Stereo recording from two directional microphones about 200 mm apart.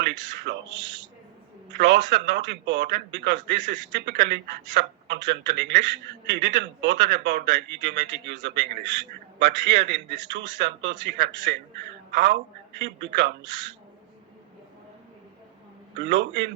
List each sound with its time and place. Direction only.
0.1 s a man's voice: 65° right (ahead or behind)
12.1 s a woman's voice: 55° right (ahead or behind)
13.1 s a man's voice: 65° right (ahead or behind)
16.0 s a man's voice: 65° right (ahead or behind)